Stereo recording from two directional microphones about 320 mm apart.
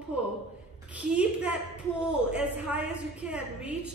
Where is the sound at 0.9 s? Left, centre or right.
Centre.